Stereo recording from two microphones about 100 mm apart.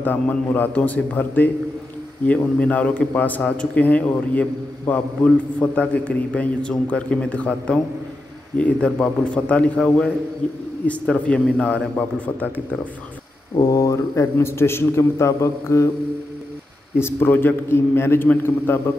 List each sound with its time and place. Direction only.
0.0 s a man's voice: 20° left (ahead or behind)
13.6 s a man's voice: 30° left (ahead or behind)
17.0 s a man's voice: 20° left (ahead or behind)